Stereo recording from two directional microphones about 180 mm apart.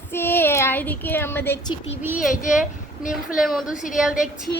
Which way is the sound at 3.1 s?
Centre (ahead or behind).